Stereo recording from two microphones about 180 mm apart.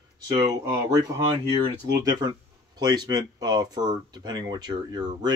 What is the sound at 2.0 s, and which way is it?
Speech, 25° right (ahead or behind).